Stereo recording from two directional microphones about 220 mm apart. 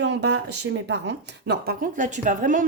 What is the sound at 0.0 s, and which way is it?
Speech, 50° right (ahead or behind).